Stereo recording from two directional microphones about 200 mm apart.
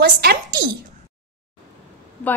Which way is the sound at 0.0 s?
50° right (ahead or behind).